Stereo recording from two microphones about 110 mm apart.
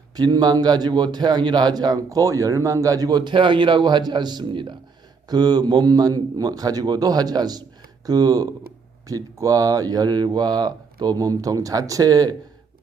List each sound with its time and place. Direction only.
0.2 s a man's voice: 35° right (ahead or behind)